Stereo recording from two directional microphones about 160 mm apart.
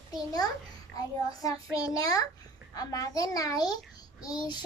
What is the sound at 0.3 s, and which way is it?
Child singing, 25° left (ahead or behind).